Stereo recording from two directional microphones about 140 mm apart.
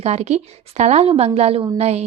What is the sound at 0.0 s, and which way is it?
A woman's voice, 50° right (ahead or behind).